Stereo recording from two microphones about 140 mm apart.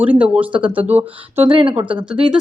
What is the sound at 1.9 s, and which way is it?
Speech, 5° right (ahead or behind).